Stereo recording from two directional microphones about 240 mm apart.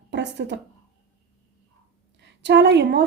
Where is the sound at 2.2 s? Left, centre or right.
Right.